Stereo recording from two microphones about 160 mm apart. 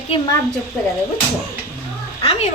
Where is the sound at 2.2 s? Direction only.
40° left (ahead or behind).